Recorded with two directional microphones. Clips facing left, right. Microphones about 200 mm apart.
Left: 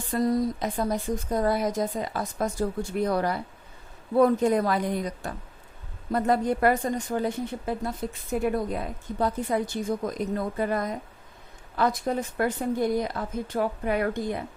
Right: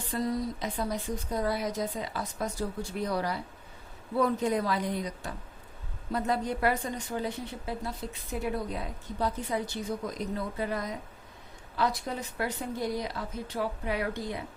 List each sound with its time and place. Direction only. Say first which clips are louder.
0.1 s a woman's voice: left 6 dB; 45° left (ahead or behind)